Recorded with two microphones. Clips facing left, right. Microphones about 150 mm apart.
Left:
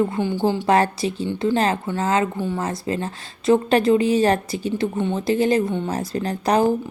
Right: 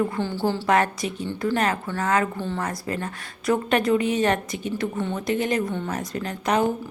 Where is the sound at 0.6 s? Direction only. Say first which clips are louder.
Left 2 dB; 30° left (ahead or behind).